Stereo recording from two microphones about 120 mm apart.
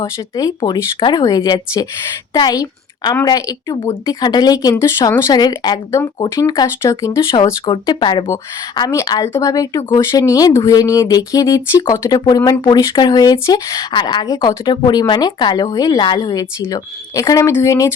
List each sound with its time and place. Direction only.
0.0 s a woman's voice: 30° left (ahead or behind)
7.6 s speech: 40° left (ahead or behind); by 17.8 s 25° left (ahead or behind)